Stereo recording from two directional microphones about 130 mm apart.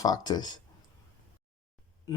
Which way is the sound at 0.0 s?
30° left (ahead or behind).